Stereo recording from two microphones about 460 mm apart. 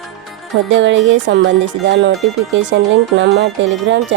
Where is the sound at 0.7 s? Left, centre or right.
Right.